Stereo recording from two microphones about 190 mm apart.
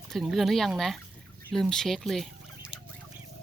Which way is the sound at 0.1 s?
Centre (ahead or behind).